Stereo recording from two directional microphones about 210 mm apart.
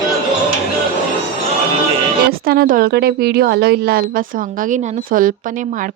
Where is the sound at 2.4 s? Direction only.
45° right (ahead or behind).